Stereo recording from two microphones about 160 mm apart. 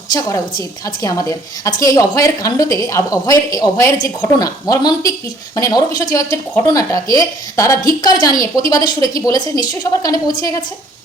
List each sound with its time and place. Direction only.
0.1 s speech: 25° left (ahead or behind)